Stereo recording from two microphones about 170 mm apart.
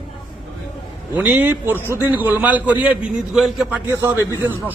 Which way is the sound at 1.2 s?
10° right (ahead or behind).